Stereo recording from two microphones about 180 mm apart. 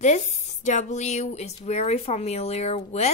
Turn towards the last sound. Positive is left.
turn(degrees=40)  # may be behind; listen again after turning